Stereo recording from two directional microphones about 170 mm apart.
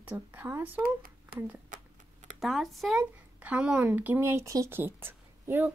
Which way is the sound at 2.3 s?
Centre (ahead or behind).